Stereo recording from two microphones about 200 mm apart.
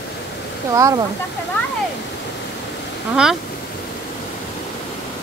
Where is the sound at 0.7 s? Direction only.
15° right (ahead or behind).